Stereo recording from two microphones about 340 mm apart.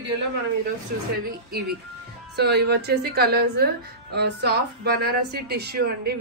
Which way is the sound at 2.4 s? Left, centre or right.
Right.